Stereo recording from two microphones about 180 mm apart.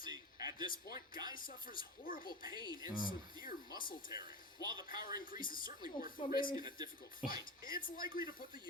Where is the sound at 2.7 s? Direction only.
20° right (ahead or behind).